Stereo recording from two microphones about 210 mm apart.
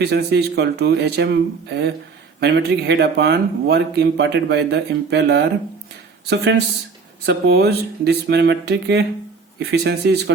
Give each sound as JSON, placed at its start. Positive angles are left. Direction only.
{"t": 0.0, "sound": "a man's voice", "side_deg": -50}